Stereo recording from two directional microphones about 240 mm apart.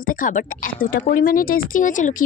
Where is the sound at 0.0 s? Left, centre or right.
Left.